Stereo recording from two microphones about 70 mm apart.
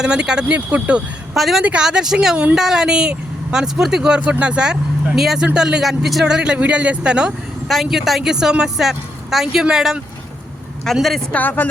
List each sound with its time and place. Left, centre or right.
0.0 s speech: centre
1.3 s a woman's voice: centre
1.6 s speech: centre
10.9 s a woman's voice: centre
11.3 s speech: left